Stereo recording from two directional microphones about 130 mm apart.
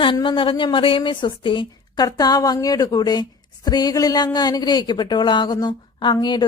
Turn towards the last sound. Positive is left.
turn(degrees=35)  # may be behind; listen again after turning